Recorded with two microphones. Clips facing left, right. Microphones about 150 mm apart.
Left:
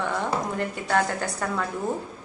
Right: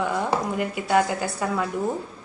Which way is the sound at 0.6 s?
10° right (ahead or behind).